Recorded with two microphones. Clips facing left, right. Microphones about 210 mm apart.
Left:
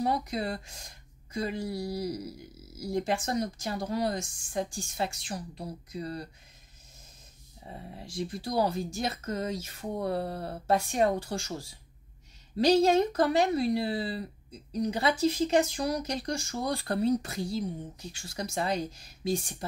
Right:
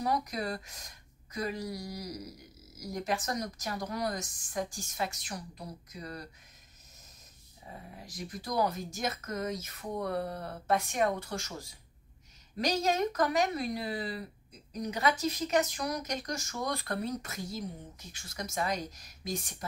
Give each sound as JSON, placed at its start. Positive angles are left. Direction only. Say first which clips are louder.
{"t": 0.0, "sound": "speech", "louder": "left 3 dB", "side_deg": 25}
{"t": 7.6, "sound": "speech", "louder": "left 4 dB", "side_deg": 30}